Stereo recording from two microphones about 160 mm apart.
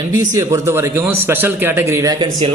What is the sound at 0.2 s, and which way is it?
Speech, 20° right (ahead or behind).